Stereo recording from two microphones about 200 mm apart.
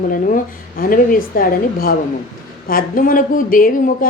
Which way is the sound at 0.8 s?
45° left (ahead or behind).